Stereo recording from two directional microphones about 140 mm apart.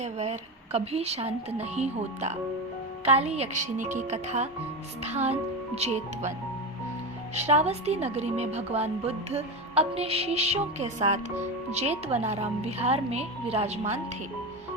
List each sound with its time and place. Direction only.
0.0 s a woman's voice: 50° right (ahead or behind)
7.3 s a woman's voice: 50° right (ahead or behind)